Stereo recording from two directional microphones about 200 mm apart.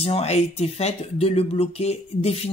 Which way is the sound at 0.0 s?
30° left (ahead or behind).